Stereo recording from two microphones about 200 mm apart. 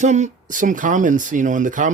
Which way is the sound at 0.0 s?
35° right (ahead or behind).